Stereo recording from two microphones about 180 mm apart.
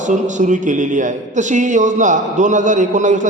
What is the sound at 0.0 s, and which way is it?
A man's voice, 45° right (ahead or behind).